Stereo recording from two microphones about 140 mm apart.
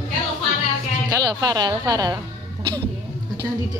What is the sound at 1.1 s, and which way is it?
A woman's voice, 30° right (ahead or behind).